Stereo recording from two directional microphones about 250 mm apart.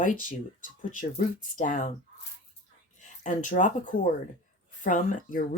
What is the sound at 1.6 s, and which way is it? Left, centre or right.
Speech, left.